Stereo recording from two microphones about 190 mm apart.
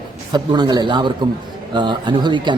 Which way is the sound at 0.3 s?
20° right (ahead or behind).